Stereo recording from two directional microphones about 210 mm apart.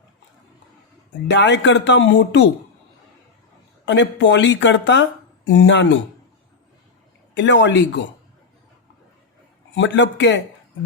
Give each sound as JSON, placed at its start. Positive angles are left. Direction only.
{"t": 1.3, "sound": "speech", "side_deg": 60}
{"t": 3.8, "sound": "speech", "side_deg": 60}
{"t": 7.3, "sound": "speech", "side_deg": 60}
{"t": 9.7, "sound": "speech", "side_deg": 60}